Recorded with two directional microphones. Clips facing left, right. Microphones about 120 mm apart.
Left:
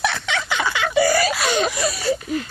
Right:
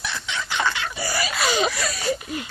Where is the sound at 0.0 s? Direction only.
80° left.